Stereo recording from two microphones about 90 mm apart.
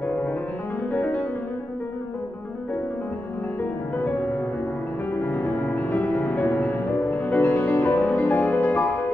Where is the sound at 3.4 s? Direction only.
20° left (ahead or behind).